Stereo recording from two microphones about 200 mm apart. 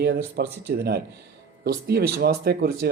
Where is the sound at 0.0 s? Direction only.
55° right (ahead or behind).